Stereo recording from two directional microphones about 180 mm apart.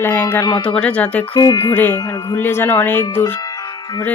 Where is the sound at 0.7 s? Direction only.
5° left (ahead or behind).